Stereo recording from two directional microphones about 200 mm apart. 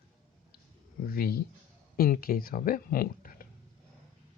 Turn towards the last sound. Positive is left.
turn(degrees=45)  # may be behind; listen again after turning